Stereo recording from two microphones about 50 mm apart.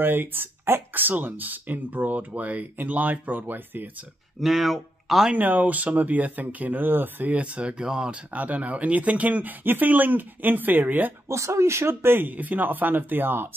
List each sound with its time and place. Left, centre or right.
0.0 s speech: right
4.4 s speech: centre
5.3 s speech: right; by 8.2 s centre
8.3 s speech: right
11.2 s speech: right